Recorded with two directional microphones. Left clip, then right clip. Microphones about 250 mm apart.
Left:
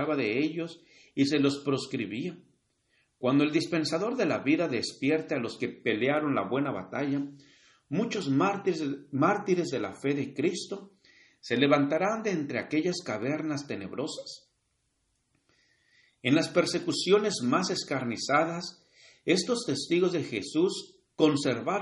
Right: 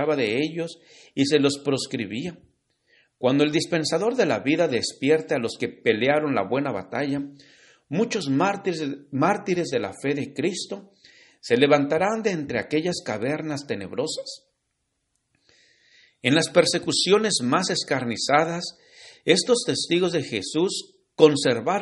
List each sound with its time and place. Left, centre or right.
0.0 s a man's voice: right
16.0 s a man's voice: right